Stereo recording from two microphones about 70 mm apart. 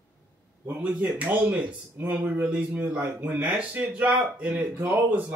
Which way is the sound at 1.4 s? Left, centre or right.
Centre.